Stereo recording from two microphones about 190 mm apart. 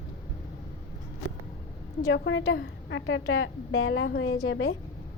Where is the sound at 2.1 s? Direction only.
75° left (ahead or behind).